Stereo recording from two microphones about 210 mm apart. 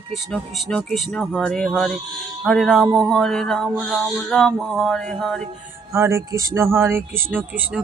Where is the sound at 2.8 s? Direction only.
20° right (ahead or behind).